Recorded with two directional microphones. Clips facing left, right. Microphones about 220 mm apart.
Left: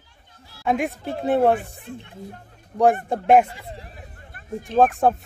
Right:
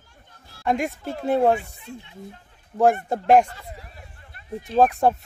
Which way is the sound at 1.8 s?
50° left (ahead or behind).